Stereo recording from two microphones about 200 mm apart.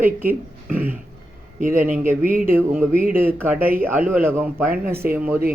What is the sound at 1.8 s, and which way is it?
Speech, 5° right (ahead or behind).